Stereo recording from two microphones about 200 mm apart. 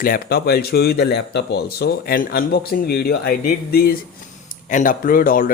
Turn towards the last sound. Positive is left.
turn(degrees=45)  # may be behind; listen again after turning